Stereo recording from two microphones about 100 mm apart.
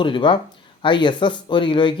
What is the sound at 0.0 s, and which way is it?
Speech, 55° left (ahead or behind).